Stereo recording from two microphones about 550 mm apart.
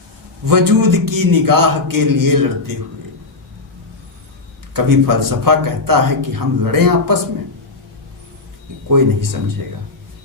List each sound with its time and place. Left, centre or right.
0.4 s a man's voice: right
4.7 s a man's voice: right
8.9 s a man's voice: right